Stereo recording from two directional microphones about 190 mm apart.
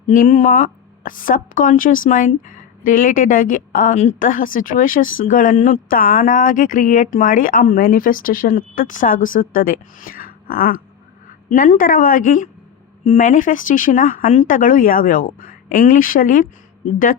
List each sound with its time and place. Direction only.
0.1 s speech: 40° left (ahead or behind)